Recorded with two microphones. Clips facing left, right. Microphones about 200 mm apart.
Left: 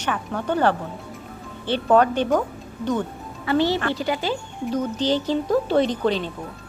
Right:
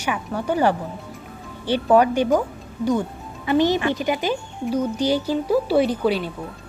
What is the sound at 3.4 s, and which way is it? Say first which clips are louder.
A woman's voice: right 2 dB; 15° right (ahead or behind).